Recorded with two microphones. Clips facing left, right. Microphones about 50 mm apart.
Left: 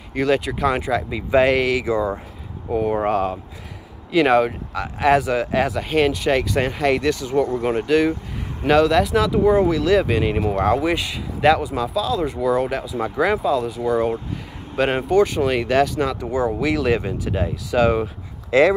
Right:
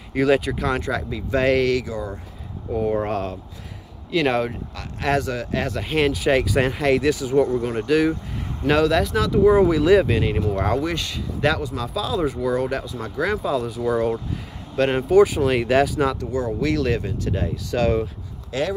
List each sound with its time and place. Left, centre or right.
0.1 s speech: centre
1.9 s speech: left
2.8 s speech: centre
4.1 s speech: centre
9.5 s speech: centre
10.0 s speech: centre
11.9 s speech: centre
13.9 s speech: centre
15.0 s speech: centre
16.2 s speech: left
18.0 s a sound: left